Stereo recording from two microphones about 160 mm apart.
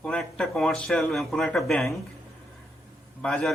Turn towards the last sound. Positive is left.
turn(degrees=5)  # may be behind; listen again after turning